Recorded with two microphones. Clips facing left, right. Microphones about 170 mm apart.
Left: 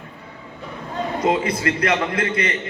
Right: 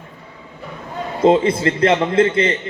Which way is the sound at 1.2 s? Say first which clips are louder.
Right 8 dB; 25° right (ahead or behind).